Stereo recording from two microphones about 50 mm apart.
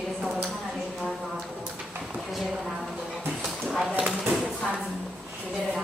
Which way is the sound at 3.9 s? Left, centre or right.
Right.